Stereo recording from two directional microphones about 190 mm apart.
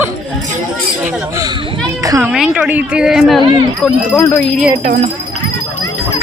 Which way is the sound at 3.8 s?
10° left (ahead or behind).